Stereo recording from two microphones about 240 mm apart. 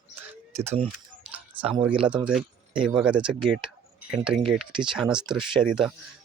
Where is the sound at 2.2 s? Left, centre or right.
Centre.